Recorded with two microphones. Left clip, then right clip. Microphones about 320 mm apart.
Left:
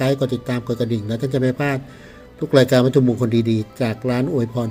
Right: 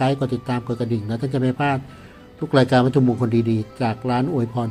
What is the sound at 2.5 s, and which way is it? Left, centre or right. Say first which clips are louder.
A man's voice: left 3 dB; centre.